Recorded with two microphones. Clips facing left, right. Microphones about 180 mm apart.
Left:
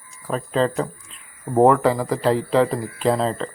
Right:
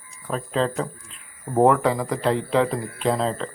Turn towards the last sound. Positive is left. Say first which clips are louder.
# left 2 dB
turn(degrees=0)  # may be behind; listen again after turning